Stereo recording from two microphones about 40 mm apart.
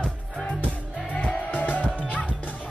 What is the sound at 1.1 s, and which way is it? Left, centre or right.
Music, left.